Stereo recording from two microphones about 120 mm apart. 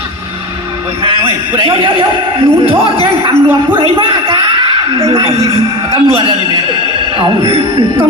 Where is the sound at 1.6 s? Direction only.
45° right (ahead or behind).